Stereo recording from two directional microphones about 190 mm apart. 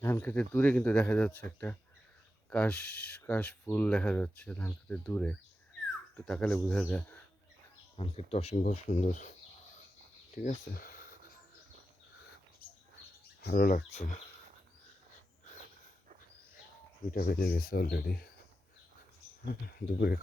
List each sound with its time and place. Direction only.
0.0 s speech: 10° left (ahead or behind)
7.9 s speech: 30° left (ahead or behind)
10.3 s speech: 45° left (ahead or behind)
13.4 s speech: 50° left (ahead or behind)
17.1 s speech: 55° left (ahead or behind)
20.0 s speech: 55° left (ahead or behind)